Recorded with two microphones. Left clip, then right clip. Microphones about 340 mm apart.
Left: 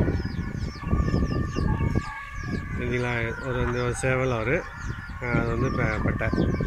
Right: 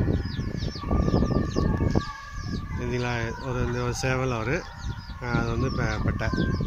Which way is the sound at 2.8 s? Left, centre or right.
Centre.